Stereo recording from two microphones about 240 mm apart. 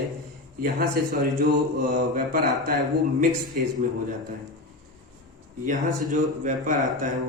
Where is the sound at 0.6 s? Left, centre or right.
Right.